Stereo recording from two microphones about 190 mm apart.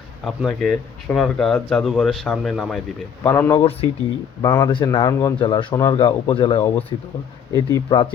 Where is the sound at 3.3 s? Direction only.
15° left (ahead or behind).